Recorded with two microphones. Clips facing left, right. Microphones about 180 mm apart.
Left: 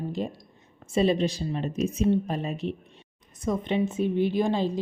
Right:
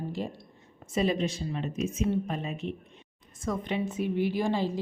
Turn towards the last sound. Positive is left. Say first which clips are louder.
# left 3 dB
turn(degrees=20)  # may be behind; listen again after turning